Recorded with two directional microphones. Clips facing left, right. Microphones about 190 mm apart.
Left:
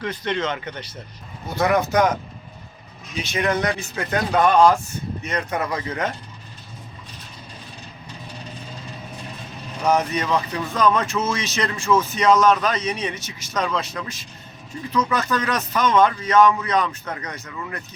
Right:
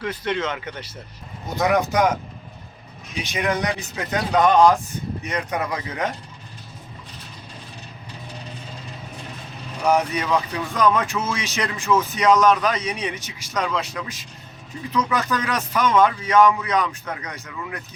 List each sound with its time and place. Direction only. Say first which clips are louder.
0.0 s speech: even; 5° right (ahead or behind)
3.2 s speech: left 1 dB; 15° right (ahead or behind)
9.8 s speech: even; 10° right (ahead or behind)